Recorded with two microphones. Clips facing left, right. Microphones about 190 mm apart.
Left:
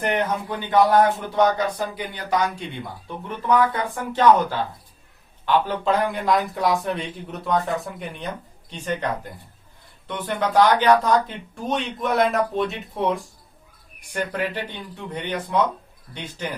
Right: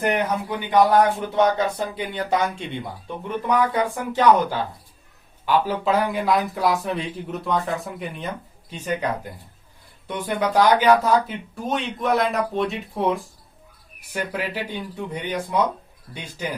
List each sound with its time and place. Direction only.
0.0 s speech: 10° right (ahead or behind)
3.5 s speech: 10° right (ahead or behind)
10.1 s speech: 10° right (ahead or behind)